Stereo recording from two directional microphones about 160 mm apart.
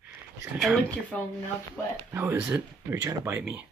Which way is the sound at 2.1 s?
15° right (ahead or behind).